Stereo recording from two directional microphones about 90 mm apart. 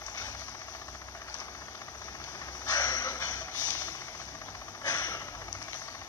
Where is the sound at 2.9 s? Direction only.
45° left (ahead or behind).